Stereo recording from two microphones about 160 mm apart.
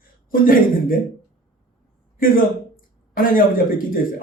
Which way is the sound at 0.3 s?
65° left (ahead or behind).